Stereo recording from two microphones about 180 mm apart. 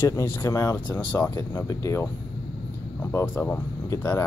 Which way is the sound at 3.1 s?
15° left (ahead or behind).